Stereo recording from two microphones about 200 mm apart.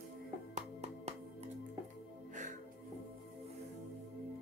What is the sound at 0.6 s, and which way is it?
Music, 35° right (ahead or behind).